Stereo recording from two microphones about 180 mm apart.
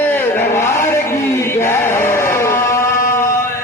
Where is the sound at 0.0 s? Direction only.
10° left (ahead or behind).